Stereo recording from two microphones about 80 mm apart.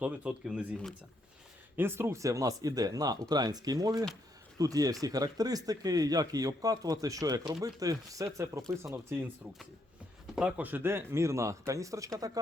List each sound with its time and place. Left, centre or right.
0.0 s speech: centre
1.7 s a man's voice: right
9.0 s speech: right
10.6 s speech: right